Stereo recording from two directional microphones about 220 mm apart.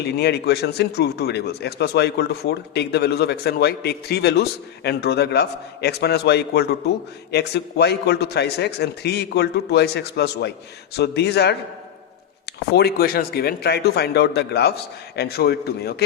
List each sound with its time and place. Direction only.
0.0 s a man's voice: 50° left (ahead or behind)
12.7 s a man's voice: 45° left (ahead or behind)